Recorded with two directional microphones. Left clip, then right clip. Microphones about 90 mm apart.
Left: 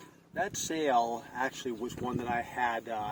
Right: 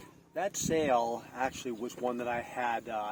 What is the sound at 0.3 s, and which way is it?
Speech, 35° right (ahead or behind).